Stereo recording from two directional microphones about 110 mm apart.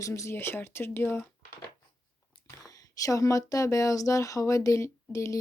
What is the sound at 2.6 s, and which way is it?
Speech, 30° left (ahead or behind).